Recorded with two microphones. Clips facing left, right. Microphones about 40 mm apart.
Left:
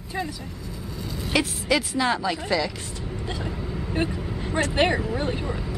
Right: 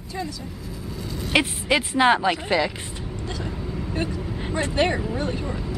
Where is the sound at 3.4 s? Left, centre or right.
Centre.